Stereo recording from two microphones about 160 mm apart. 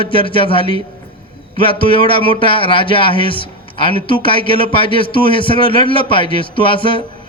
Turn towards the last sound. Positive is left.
turn(degrees=30)  # may be behind; listen again after turning